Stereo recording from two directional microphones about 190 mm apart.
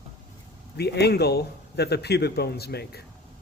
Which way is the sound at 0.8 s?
60° left (ahead or behind).